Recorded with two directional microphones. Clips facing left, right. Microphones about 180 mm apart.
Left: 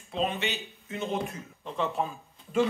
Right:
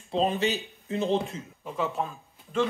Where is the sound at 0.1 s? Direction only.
35° right (ahead or behind).